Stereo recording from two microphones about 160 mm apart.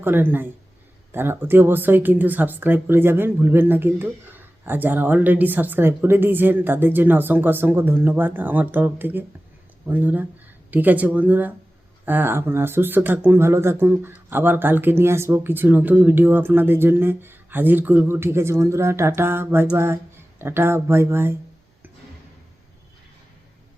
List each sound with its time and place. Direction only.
0.0 s speech: 15° right (ahead or behind)